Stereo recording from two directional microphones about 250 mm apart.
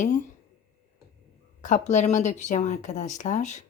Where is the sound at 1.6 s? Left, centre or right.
Left.